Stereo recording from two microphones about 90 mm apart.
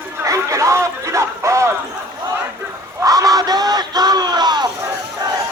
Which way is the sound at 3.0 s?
40° right (ahead or behind).